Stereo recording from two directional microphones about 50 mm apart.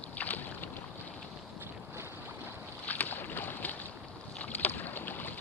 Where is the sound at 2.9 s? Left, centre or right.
Left.